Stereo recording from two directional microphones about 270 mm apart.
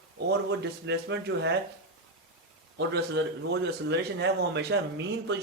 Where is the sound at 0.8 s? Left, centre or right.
Right.